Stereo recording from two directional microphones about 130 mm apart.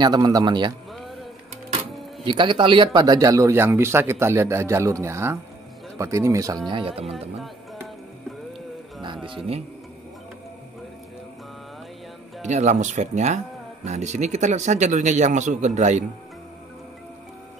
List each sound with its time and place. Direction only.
0.0 s a man's voice: 30° right (ahead or behind)
0.9 s a sound: centre (ahead or behind)
2.2 s speech: 35° right (ahead or behind)
9.0 s a man's voice: 40° right (ahead or behind)
12.4 s speech: 60° right (ahead or behind)